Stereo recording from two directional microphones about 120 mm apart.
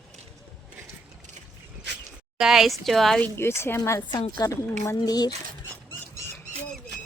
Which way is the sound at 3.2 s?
20° left (ahead or behind).